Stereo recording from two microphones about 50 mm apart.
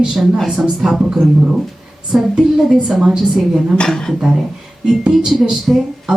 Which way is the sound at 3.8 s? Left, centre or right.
Centre.